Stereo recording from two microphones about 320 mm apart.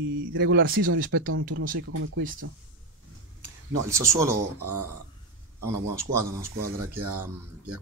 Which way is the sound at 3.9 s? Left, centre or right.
Centre.